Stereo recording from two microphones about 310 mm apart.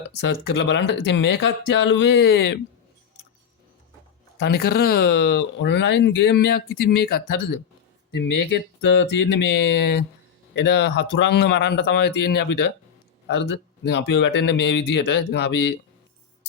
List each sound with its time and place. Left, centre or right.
0.2 s speech: left
4.4 s speech: left